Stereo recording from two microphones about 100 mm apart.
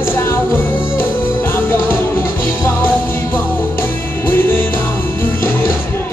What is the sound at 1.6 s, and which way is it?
Music, 25° left (ahead or behind).